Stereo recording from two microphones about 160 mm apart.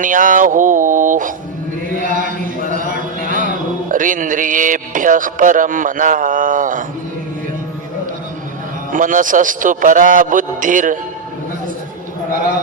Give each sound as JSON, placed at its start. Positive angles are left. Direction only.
{"t": 0.0, "sound": "speech", "side_deg": -55}
{"t": 2.0, "sound": "chant", "side_deg": -55}
{"t": 2.6, "sound": "a sound", "side_deg": -55}
{"t": 3.9, "sound": "speech", "side_deg": -55}
{"t": 8.9, "sound": "speech", "side_deg": -55}